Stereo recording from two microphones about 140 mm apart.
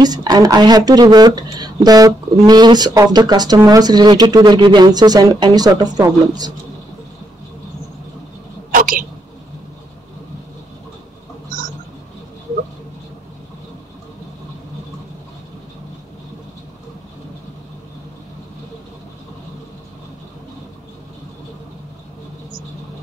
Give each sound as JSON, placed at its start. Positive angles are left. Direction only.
{"t": 0.0, "sound": "speech", "side_deg": -30}
{"t": 8.7, "sound": "speech", "side_deg": -80}